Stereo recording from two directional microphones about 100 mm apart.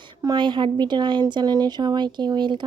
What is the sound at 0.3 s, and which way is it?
Speech, 50° right (ahead or behind).